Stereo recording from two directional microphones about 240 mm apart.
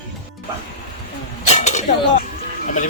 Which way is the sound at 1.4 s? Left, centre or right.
Left.